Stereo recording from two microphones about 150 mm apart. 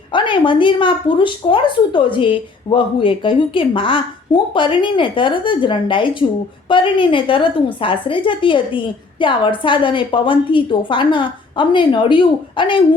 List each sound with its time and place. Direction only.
0.1 s speech: 35° left (ahead or behind)